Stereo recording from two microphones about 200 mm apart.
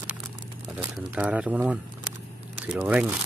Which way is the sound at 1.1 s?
5° right (ahead or behind).